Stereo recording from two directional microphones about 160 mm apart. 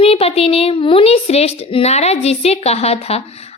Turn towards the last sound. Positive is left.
turn(degrees=40)  # may be behind; listen again after turning